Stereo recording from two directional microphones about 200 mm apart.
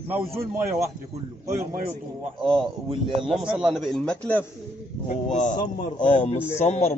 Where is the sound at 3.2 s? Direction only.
Centre (ahead or behind).